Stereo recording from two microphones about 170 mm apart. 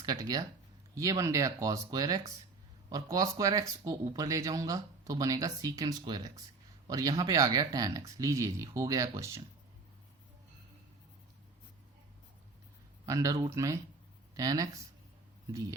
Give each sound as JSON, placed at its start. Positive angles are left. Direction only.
{"t": 0.0, "sound": "speech", "side_deg": -20}
{"t": 13.1, "sound": "speech", "side_deg": -20}